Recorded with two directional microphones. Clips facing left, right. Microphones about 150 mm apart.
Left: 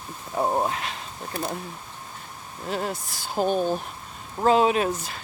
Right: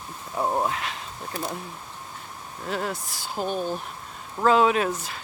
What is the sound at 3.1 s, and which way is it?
Speech, 45° left (ahead or behind).